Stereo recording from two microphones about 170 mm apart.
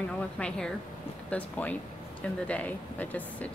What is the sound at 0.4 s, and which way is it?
Speech, 5° left (ahead or behind).